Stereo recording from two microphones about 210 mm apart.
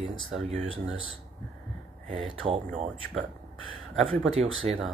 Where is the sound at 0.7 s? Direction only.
70° right (ahead or behind).